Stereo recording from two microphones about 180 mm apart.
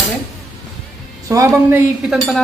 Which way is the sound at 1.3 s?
15° right (ahead or behind).